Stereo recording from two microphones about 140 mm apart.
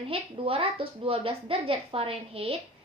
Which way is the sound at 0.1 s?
40° right (ahead or behind).